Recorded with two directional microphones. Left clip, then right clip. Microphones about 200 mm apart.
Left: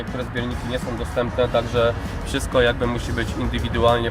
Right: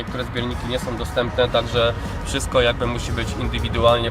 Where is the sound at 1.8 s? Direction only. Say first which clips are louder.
Even; 15° left (ahead or behind).